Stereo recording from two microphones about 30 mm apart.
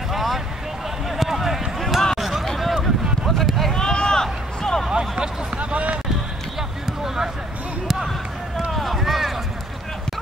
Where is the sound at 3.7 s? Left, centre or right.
Left.